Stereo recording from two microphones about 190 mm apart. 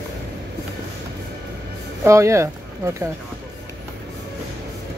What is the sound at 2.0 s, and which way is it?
Speech, 15° right (ahead or behind).